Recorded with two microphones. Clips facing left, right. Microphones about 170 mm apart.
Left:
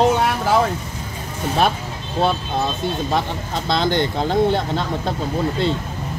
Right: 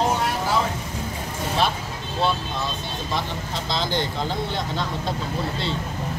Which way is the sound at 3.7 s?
55° left (ahead or behind).